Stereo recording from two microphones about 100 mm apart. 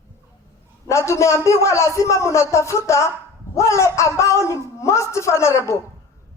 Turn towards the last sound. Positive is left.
turn(degrees=30)  # may be behind; listen again after turning